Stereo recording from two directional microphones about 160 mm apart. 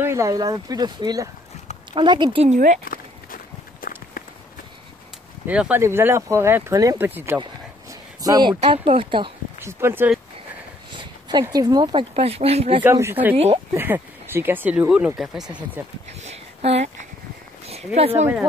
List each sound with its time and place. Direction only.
0.0 s speech: 20° right (ahead or behind)
2.4 s speech: 45° right (ahead or behind)
2.8 s walk: 60° left (ahead or behind)
5.5 s speech: 10° right (ahead or behind)
7.9 s a sound: 25° right (ahead or behind)
8.7 s speech: 35° right (ahead or behind)
9.6 s speech: 15° right (ahead or behind)
10.9 s a sound: 30° right (ahead or behind)
11.4 s speech: 25° right (ahead or behind)
12.8 s speech: 15° right (ahead or behind)
16.1 s a sound: 45° right (ahead or behind)
17.6 s speech: 40° right (ahead or behind)
18.2 s speech: 15° right (ahead or behind)